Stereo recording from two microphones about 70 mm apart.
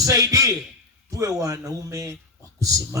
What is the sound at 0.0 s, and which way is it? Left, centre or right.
Speech, right.